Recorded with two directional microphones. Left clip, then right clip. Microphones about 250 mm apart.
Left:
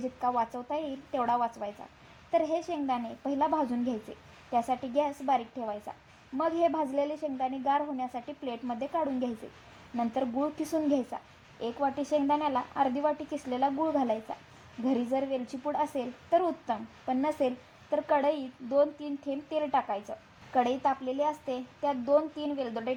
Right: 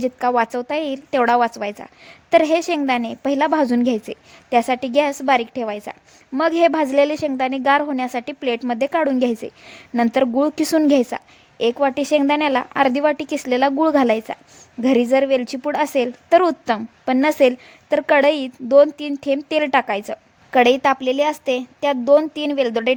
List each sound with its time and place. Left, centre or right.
0.7 s a woman's voice: right
3.5 s a woman's voice: right
4.5 s a woman's voice: right